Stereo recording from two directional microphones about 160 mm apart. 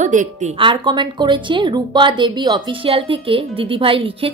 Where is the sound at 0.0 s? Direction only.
50° right (ahead or behind).